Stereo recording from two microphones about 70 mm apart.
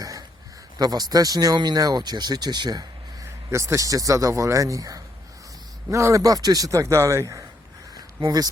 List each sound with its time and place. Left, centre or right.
0.0 s a sound: right
0.8 s speech: right
3.5 s a man's voice: right
8.2 s speech: right